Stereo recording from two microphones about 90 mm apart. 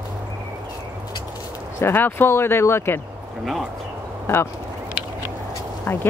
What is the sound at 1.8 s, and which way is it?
Speech, 25° left (ahead or behind).